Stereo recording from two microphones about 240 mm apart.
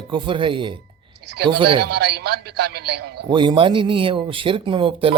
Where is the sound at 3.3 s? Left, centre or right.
Centre.